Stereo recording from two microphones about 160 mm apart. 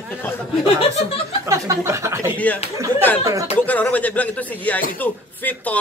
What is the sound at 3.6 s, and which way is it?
Speech, 10° left (ahead or behind).